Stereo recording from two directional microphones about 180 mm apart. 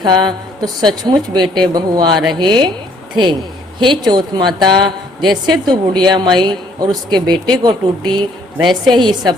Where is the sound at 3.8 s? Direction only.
25° right (ahead or behind).